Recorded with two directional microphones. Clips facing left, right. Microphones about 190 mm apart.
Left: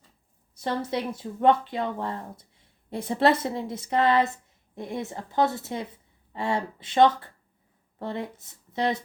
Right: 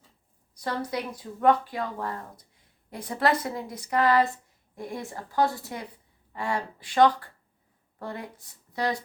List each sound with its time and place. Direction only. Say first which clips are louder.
0.5 s speech: left 2 dB; 25° left (ahead or behind)